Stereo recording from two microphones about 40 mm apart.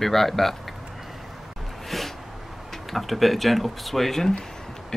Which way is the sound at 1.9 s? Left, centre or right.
Centre.